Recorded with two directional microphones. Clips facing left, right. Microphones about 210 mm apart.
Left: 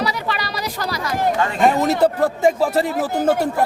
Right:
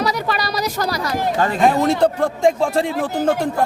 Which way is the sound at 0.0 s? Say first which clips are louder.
Right 3 dB; 40° right (ahead or behind).